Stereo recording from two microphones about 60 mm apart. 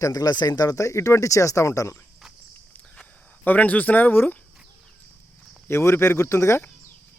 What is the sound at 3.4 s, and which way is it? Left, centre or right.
Speech, left.